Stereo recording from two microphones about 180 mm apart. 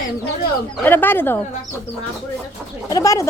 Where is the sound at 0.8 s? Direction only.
10° left (ahead or behind).